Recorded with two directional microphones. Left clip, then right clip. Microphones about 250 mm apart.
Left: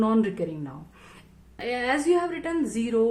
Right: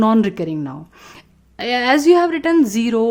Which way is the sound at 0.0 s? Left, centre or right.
Right.